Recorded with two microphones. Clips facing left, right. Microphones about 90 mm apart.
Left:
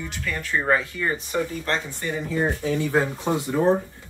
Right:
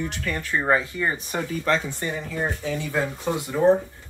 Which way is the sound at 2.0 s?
30° right (ahead or behind).